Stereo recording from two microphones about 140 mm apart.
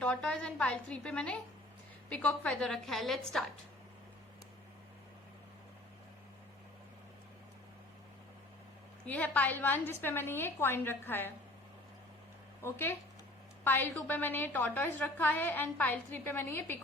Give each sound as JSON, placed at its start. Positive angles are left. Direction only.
{"t": 0.0, "sound": "a woman's voice", "side_deg": 5}
{"t": 9.0, "sound": "a woman's voice", "side_deg": 10}
{"t": 12.6, "sound": "a woman's voice", "side_deg": 15}